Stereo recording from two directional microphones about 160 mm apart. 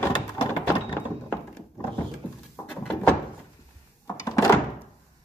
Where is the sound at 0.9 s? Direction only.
15° left (ahead or behind).